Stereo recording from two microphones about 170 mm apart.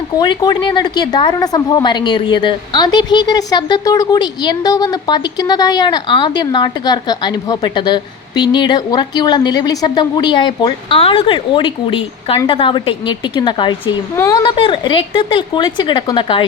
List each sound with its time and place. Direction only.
0.2 s a woman's voice: 25° left (ahead or behind)